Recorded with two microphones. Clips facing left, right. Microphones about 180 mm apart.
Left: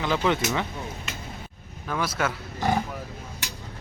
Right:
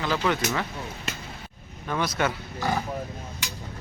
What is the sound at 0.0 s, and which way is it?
Speech, 15° left (ahead or behind).